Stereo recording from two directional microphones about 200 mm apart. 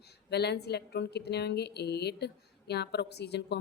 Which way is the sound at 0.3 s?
55° left (ahead or behind).